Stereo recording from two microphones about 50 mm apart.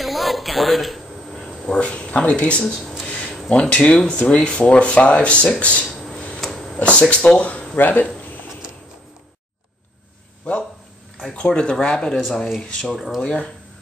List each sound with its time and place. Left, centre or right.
0.0 s a sound: centre
1.4 s speech: left
5.9 s a sound: centre
6.7 s speech: left
7.7 s speech: left
11.2 s speech: centre
12.3 s speech: centre